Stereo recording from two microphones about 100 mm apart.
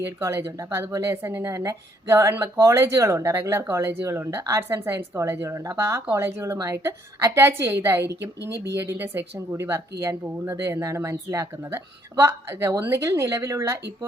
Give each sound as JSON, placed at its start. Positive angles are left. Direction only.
{"t": 0.0, "sound": "speech", "side_deg": -25}